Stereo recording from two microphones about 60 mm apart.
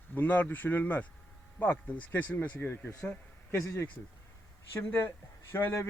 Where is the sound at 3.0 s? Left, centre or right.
Left.